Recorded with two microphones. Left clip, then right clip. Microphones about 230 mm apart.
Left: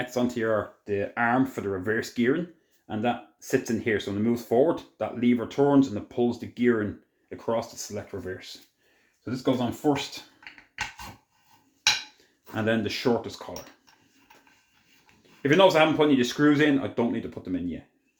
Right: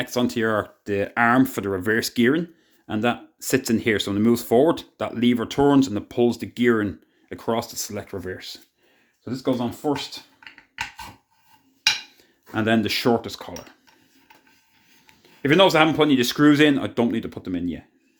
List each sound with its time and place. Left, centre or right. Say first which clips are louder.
0.0 s speech: right 4 dB; right
9.2 s speech: right 2 dB; right
12.5 s speech: right 5 dB; right
15.0 s speech: right 3 dB; right